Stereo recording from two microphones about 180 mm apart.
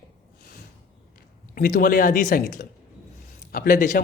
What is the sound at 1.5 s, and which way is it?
A man's voice, 45° left (ahead or behind).